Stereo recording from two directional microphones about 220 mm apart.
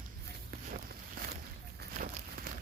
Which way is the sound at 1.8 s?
40° right (ahead or behind).